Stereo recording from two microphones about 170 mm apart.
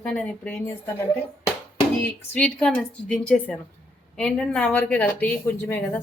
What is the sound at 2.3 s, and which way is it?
A woman's voice, 5° left (ahead or behind).